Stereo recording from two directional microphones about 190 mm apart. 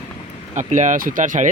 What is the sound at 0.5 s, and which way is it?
Speech, 40° right (ahead or behind).